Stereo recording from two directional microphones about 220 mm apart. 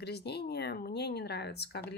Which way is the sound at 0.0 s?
50° left (ahead or behind).